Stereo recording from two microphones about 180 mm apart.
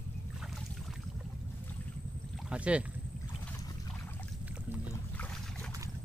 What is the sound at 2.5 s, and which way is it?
Boat, 5° right (ahead or behind).